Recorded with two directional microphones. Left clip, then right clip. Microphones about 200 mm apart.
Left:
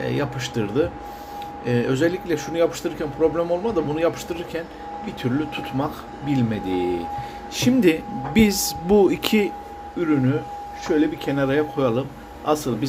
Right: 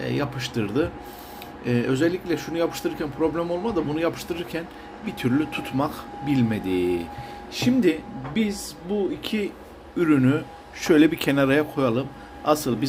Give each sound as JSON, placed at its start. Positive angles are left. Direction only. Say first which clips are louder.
{"t": 0.0, "sound": "a man's voice", "louder": "left 2 dB", "side_deg": 0}
{"t": 7.5, "sound": "speech", "louder": "left 3 dB", "side_deg": 10}
{"t": 8.3, "sound": "speech", "louder": "left 8 dB", "side_deg": 30}
{"t": 10.0, "sound": "a man's voice", "louder": "right 1 dB", "side_deg": -15}